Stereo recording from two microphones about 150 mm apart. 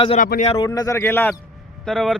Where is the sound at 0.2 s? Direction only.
60° left (ahead or behind).